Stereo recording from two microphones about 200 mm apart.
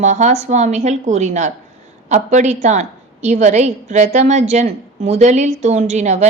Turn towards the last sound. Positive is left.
turn(degrees=-35)  # may be behind; listen again after turning